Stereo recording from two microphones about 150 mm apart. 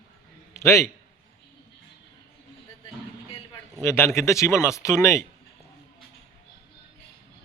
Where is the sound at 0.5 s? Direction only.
20° left (ahead or behind).